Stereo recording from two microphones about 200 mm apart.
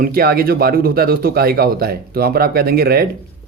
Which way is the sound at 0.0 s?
50° right (ahead or behind).